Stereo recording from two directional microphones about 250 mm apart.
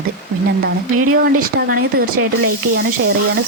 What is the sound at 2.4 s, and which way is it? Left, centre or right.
Speech, right.